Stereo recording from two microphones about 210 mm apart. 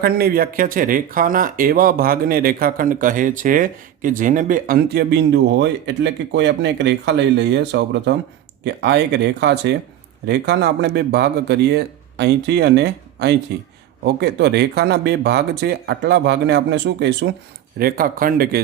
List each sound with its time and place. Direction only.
0.0 s speech: 45° right (ahead or behind)